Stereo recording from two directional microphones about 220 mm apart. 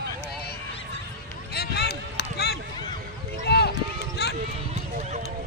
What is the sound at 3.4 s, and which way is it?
Clip-clop, 45° left (ahead or behind).